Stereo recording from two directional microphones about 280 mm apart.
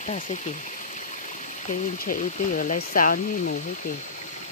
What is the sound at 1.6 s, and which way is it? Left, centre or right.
Speech, left.